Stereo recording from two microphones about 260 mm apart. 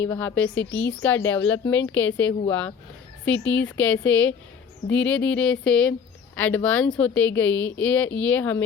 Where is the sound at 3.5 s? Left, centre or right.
Centre.